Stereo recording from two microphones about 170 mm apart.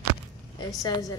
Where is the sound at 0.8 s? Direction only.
20° left (ahead or behind).